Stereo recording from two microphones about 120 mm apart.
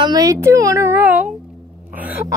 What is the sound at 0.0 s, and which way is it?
A child's voice, 30° right (ahead or behind).